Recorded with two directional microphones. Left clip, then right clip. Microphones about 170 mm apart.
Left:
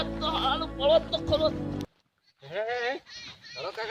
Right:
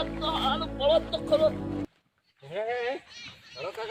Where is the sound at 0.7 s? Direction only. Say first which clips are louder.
Left 1 dB; 35° right (ahead or behind).